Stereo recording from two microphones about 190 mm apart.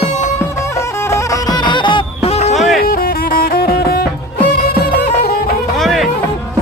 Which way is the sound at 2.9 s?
50° left (ahead or behind).